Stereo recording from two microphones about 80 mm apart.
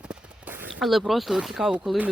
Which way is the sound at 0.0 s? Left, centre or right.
Centre.